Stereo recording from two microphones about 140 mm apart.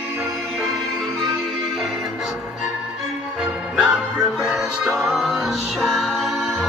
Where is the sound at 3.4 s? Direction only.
5° right (ahead or behind).